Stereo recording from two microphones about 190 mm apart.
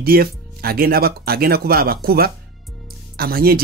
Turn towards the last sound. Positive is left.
turn(degrees=-55)  # may be behind; listen again after turning